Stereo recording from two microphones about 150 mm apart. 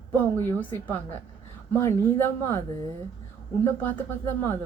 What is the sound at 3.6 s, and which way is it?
Speech, 15° left (ahead or behind).